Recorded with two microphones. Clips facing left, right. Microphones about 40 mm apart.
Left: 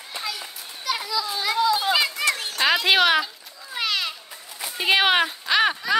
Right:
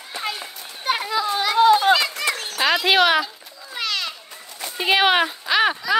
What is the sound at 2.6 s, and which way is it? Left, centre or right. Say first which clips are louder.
Children playing: right 2 dB; centre.